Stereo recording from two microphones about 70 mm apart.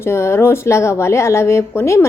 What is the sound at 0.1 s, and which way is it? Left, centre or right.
A woman's voice, left.